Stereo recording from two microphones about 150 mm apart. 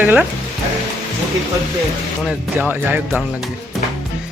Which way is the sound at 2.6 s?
10° right (ahead or behind).